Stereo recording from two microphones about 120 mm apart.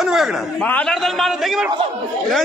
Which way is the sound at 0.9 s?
Centre (ahead or behind).